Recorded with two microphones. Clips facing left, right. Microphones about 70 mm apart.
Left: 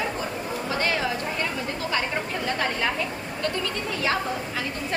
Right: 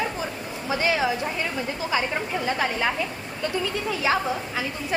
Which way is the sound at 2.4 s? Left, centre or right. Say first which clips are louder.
Right 1 dB; centre.